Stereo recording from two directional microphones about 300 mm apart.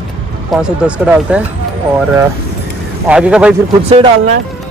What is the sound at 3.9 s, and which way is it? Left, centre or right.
Speech, right.